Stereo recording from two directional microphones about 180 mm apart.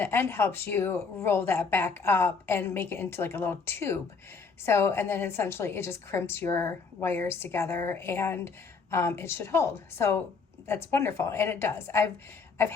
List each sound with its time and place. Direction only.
0.0 s a woman's voice: 15° left (ahead or behind)